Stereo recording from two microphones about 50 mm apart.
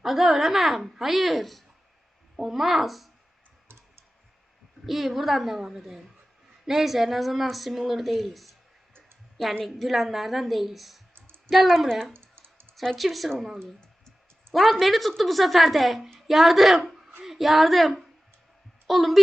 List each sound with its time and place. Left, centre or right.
0.0 s a woman's voice: centre
3.7 s computer keyboard: right
4.9 s a woman's voice: centre
9.6 s a woman's voice: centre
12.1 s typing: right
12.7 s a woman's voice: centre
14.5 s a woman's voice: centre